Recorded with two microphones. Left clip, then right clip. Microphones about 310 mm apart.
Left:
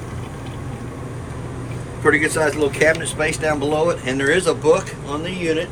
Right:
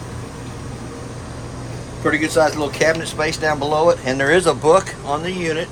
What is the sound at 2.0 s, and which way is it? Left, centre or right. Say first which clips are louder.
Speech: even; centre.